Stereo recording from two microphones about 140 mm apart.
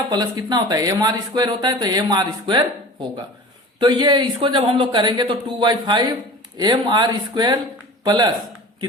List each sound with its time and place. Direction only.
0.1 s a man's voice: 30° right (ahead or behind)